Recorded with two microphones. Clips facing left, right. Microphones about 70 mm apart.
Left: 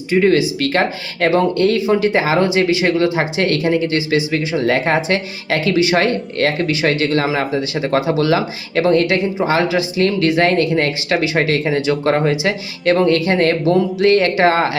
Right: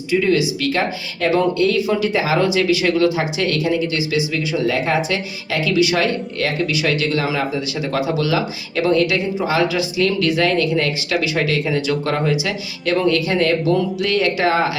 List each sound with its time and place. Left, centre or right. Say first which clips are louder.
0.1 s speech: left 3 dB; left
1.7 s speech: left 3 dB; left